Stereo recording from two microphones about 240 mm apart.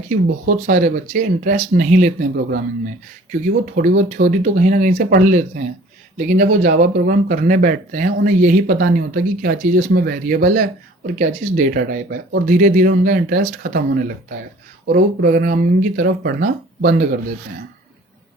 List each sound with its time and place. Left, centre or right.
0.1 s speech: right
3.8 s speech: right